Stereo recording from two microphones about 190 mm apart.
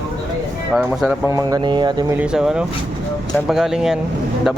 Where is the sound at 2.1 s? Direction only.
5° right (ahead or behind).